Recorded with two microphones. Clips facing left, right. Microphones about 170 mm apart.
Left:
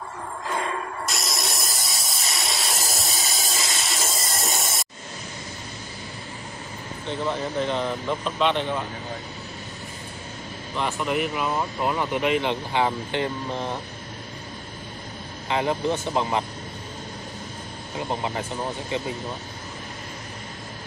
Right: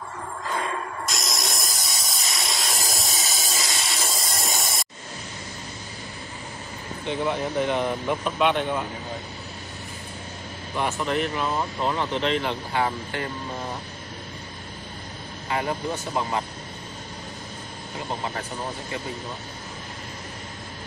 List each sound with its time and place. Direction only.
1.0 s hiss: centre (ahead or behind)
7.1 s speech: 10° right (ahead or behind)
10.8 s speech: 5° right (ahead or behind)
11.1 s speech: 5° left (ahead or behind); by 13.7 s 20° left (ahead or behind)
15.5 s speech: 20° left (ahead or behind)
17.9 s speech: 20° left (ahead or behind)